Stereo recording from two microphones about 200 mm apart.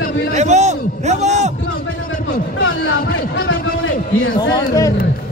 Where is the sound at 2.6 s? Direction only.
90° left.